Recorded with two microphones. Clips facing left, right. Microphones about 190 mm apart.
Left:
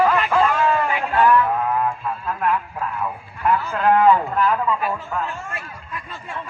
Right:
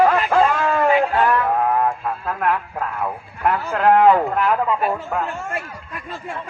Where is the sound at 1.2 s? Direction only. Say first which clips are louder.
Left 1 dB; 45° right (ahead or behind).